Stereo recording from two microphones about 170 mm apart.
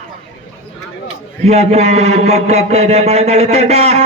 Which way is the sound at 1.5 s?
40° right (ahead or behind).